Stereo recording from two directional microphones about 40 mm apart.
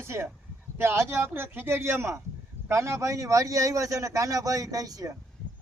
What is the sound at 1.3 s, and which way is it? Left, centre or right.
Speech, right.